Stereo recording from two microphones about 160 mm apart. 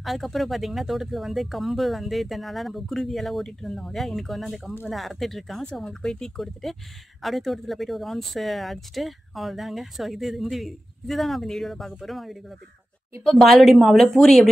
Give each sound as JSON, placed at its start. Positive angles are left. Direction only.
{"t": 0.0, "sound": "speech", "side_deg": 0}